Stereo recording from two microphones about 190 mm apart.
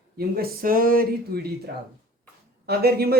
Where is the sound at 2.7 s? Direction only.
55° right (ahead or behind).